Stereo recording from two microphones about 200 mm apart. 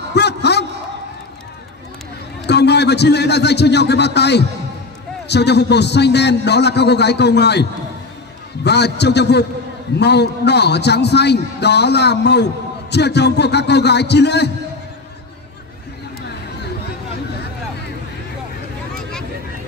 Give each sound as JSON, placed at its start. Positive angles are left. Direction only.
{"t": 0.1, "sound": "a sound", "side_deg": 55}
{"t": 2.4, "sound": "a man's voice", "side_deg": 55}
{"t": 8.6, "sound": "a man's voice", "side_deg": 55}